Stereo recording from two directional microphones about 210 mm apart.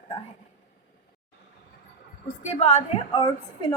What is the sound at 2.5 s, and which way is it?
A woman's voice, 30° left (ahead or behind).